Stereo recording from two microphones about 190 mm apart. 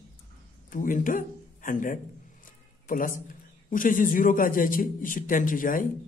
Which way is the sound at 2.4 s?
45° left (ahead or behind).